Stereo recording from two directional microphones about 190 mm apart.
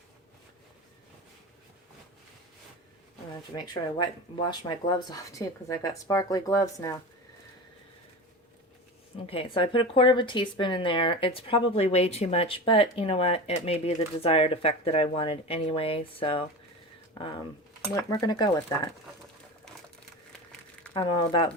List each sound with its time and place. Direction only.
3.5 s speech: 20° left (ahead or behind)
9.1 s speech: 30° left (ahead or behind)
17.9 s speech: 20° left (ahead or behind)
20.9 s speech: 25° left (ahead or behind)